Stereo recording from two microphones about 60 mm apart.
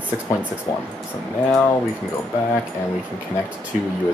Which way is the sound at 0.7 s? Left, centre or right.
Left.